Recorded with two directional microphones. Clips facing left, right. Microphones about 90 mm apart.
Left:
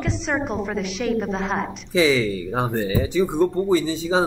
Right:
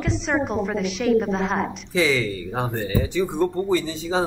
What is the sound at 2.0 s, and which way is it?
Speech, 15° left (ahead or behind).